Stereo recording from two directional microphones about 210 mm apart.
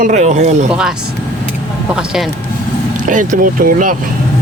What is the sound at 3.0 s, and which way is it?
Speech, 40° right (ahead or behind).